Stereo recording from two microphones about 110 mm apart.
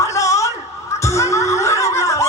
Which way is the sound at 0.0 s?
30° left (ahead or behind).